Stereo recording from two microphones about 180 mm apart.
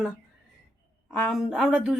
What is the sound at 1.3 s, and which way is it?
Speech, centre (ahead or behind).